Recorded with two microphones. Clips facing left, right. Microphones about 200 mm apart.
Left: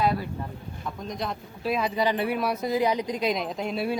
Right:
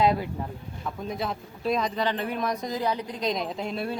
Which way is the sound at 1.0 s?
5° right (ahead or behind).